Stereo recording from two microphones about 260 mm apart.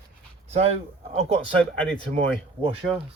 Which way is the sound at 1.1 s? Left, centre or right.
Right.